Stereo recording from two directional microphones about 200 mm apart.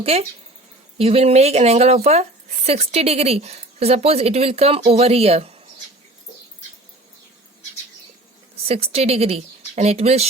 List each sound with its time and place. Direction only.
0.0 s speech: 30° right (ahead or behind)
8.6 s speech: 30° right (ahead or behind)